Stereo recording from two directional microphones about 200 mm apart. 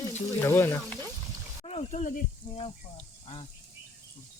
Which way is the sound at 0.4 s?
10° left (ahead or behind).